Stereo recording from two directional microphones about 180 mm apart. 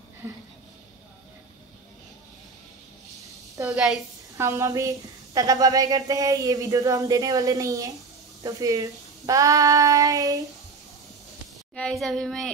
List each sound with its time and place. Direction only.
3.7 s a woman's voice: 5° right (ahead or behind)
4.4 s a woman's voice: 15° right (ahead or behind)
11.7 s a child's voice: 5° left (ahead or behind)